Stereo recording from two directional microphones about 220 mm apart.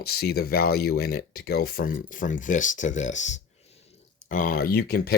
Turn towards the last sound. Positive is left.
turn(degrees=45)  # may be behind; listen again after turning